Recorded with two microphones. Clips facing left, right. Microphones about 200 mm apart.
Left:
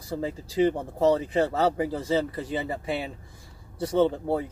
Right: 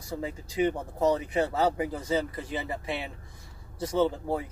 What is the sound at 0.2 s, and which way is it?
Speech, 30° left (ahead or behind).